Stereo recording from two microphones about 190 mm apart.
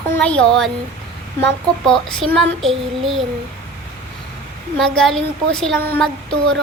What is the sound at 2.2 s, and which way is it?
A woman's voice, 5° left (ahead or behind).